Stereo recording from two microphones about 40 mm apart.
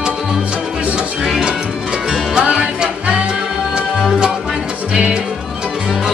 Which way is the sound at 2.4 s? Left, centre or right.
Right.